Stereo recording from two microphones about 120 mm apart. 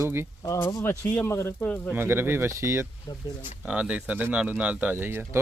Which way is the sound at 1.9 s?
20° right (ahead or behind).